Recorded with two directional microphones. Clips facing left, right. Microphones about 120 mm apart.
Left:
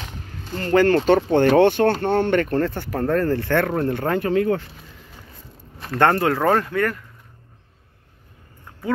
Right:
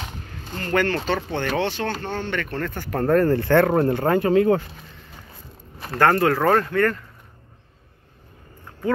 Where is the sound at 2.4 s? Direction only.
35° left (ahead or behind).